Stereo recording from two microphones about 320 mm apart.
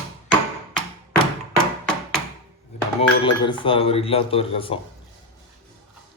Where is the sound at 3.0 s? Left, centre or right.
Centre.